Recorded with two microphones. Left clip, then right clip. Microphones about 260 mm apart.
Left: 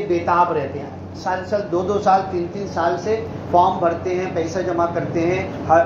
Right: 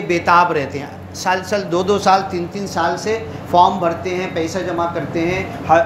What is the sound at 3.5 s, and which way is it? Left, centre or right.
Speech, right.